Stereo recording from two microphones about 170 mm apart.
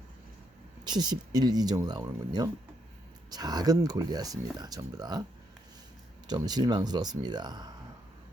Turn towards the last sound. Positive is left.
turn(degrees=-25)  # may be behind; listen again after turning